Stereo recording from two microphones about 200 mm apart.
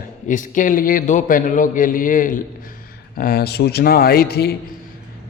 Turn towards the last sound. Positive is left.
turn(degrees=50)  # may be behind; listen again after turning